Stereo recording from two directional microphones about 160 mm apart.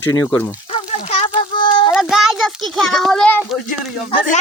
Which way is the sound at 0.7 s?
40° left (ahead or behind).